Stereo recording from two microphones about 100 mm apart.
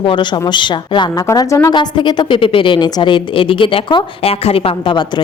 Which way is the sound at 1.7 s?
50° left (ahead or behind).